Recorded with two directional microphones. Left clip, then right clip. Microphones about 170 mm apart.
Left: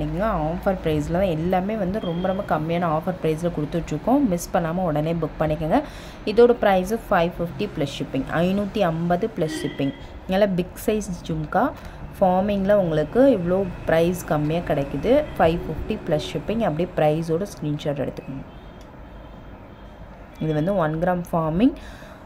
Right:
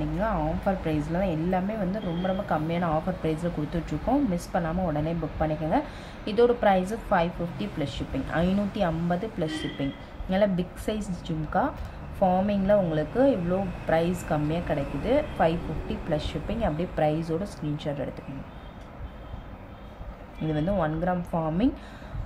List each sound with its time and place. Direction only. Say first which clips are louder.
0.2 s speech: left 5 dB; 35° left (ahead or behind)
20.4 s speech: left 5 dB; 30° left (ahead or behind)